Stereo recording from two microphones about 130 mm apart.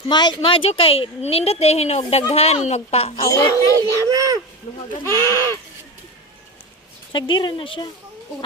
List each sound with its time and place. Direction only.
0.1 s speech: 35° left (ahead or behind); by 3.2 s 55° left (ahead or behind)
3.2 s speech: 25° left (ahead or behind)
3.8 s speech: 25° right (ahead or behind)
5.0 s speech: 20° left (ahead or behind)
7.1 s speech: 40° left (ahead or behind)